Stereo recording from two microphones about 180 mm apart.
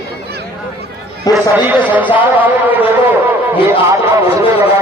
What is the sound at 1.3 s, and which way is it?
Speech, 20° left (ahead or behind).